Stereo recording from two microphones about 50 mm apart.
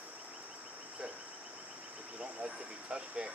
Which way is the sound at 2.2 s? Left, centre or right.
Right.